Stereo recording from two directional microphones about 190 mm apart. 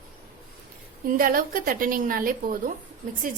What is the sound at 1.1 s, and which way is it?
Speech, 50° right (ahead or behind).